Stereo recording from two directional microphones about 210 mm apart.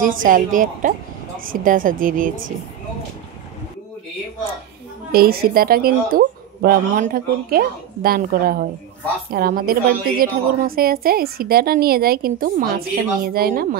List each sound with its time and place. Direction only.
0.0 s a woman's voice: 40° right (ahead or behind)
5.1 s a woman's voice: 45° right (ahead or behind)